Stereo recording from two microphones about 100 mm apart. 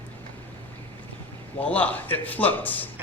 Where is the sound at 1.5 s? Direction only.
15° left (ahead or behind).